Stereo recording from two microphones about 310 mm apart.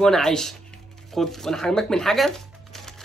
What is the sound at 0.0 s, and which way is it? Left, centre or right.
Speech, centre.